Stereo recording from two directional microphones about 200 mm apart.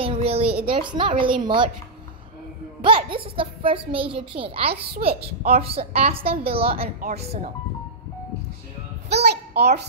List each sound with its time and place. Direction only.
0.0 s a sound: 30° right (ahead or behind)
0.7 s a woman's voice: 25° right (ahead or behind)
2.8 s a woman's voice: 25° right (ahead or behind)
4.9 s a child's voice: 50° right (ahead or behind)
5.6 s a woman's voice: 30° right (ahead or behind)
9.1 s a child's voice: 55° right (ahead or behind)